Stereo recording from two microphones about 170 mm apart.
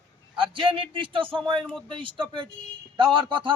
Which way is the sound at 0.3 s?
30° right (ahead or behind).